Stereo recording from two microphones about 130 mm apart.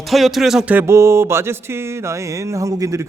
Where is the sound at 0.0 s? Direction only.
Centre (ahead or behind).